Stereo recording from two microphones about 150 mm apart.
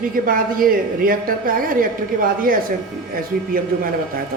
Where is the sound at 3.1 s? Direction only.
75° right (ahead or behind).